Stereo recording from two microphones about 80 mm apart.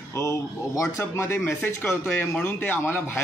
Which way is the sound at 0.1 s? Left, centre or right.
Left.